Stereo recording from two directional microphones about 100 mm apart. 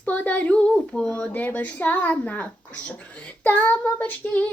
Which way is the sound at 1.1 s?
15° left (ahead or behind).